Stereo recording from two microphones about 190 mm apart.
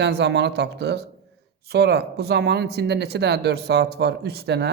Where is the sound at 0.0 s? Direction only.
60° right (ahead or behind).